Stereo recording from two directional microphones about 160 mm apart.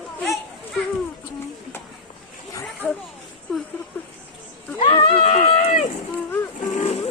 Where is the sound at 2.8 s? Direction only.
10° left (ahead or behind).